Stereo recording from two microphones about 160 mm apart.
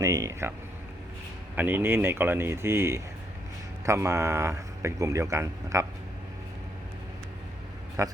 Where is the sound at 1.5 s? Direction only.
15° right (ahead or behind).